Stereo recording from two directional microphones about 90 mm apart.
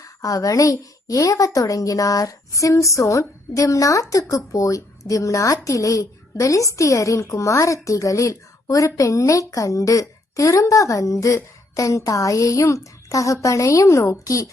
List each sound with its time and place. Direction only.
0.0 s a woman's voice: 40° left (ahead or behind)